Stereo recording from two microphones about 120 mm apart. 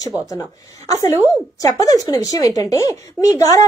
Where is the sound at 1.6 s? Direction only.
30° left (ahead or behind).